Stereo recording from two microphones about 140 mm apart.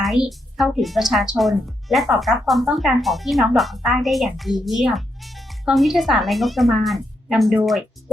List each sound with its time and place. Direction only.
0.0 s a woman's voice: centre (ahead or behind)